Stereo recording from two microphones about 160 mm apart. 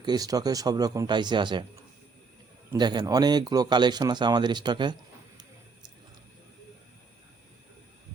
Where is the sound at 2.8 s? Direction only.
25° right (ahead or behind).